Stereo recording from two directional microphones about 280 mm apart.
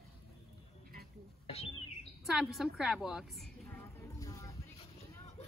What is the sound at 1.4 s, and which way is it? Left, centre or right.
Bird, left.